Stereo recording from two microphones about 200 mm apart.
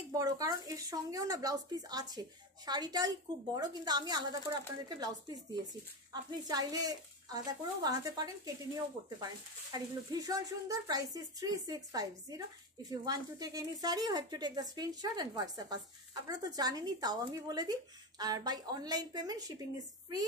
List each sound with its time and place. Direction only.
0.1 s speech: 20° right (ahead or behind)